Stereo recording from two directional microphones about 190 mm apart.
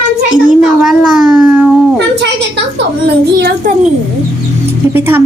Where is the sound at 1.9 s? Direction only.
65° right (ahead or behind).